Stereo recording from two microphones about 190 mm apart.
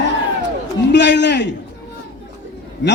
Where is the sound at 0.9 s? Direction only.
65° left (ahead or behind).